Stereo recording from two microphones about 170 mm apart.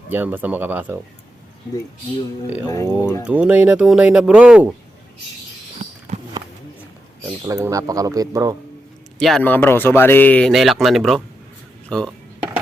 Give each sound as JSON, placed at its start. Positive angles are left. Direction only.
{"t": 0.1, "sound": "speech", "side_deg": -10}
{"t": 2.6, "sound": "speech", "side_deg": 15}
{"t": 3.2, "sound": "speech", "side_deg": -5}
{"t": 6.1, "sound": "walk", "side_deg": -45}
{"t": 7.4, "sound": "speech", "side_deg": -20}
{"t": 9.1, "sound": "speech", "side_deg": 0}
{"t": 10.5, "sound": "speech", "side_deg": 0}